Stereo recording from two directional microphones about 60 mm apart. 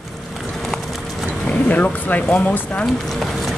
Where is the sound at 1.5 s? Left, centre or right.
Left.